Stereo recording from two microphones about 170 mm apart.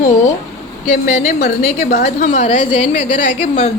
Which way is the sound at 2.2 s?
40° left (ahead or behind).